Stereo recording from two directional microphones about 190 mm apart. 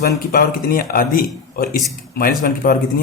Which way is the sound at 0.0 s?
50° left (ahead or behind).